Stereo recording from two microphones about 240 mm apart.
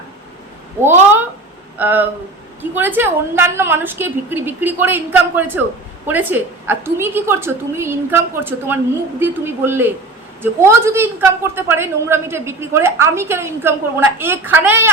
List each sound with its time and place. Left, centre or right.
1.8 s a woman's voice: centre